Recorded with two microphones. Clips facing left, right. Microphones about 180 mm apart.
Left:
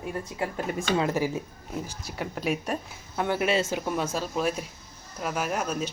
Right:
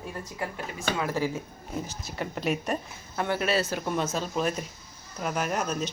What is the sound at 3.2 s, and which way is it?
Speech, 15° left (ahead or behind).